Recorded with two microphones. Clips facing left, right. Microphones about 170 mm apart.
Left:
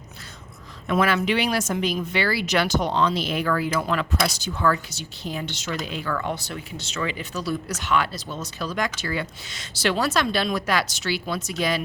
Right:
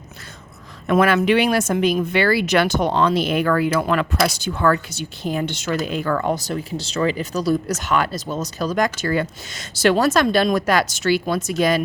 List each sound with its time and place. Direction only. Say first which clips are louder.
0.9 s speech: right 6 dB; 55° right (ahead or behind)